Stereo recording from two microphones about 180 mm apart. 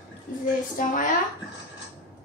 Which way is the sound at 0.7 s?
50° left (ahead or behind).